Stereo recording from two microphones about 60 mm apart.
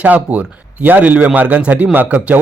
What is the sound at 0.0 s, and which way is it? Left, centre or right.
Speech, right.